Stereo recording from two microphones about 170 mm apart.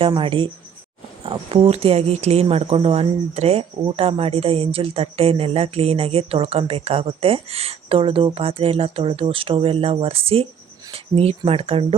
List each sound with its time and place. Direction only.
0.1 s speech: 30° right (ahead or behind)